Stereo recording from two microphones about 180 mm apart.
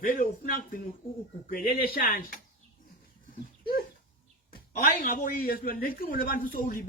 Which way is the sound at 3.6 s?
55° left (ahead or behind).